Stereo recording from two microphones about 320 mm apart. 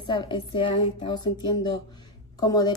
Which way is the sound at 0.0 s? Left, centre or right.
Centre.